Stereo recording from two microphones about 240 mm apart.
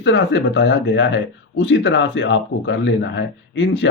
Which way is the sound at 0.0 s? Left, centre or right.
Left.